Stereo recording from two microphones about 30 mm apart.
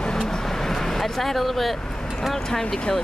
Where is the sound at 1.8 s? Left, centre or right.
Left.